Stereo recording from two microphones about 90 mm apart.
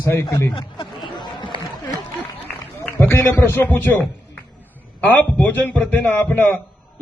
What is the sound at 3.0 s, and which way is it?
Speech, 25° left (ahead or behind).